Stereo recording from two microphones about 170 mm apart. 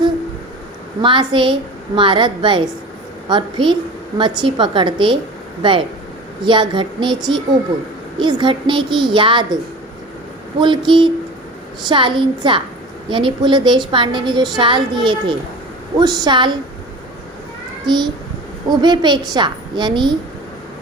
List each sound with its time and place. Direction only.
1.0 s a woman's voice: 30° right (ahead or behind)
10.6 s a woman's voice: 25° right (ahead or behind)
17.8 s a woman's voice: 25° right (ahead or behind)